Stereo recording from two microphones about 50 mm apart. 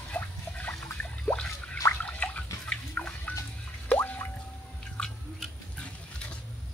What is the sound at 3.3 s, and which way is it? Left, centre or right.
Drip, left.